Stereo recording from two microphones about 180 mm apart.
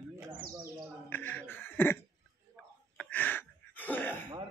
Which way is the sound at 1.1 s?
10° left (ahead or behind).